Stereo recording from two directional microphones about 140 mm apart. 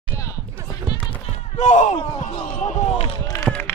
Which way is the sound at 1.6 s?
60° left (ahead or behind).